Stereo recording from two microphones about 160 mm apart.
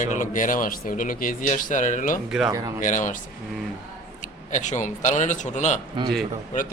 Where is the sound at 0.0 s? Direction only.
55° left (ahead or behind).